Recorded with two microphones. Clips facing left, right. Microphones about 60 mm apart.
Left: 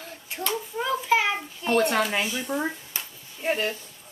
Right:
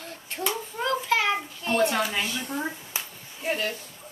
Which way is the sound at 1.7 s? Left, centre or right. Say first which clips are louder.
Left 2 dB; left.